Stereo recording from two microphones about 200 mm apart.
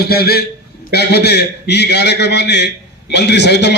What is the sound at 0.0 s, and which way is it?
A man's voice, 50° left (ahead or behind).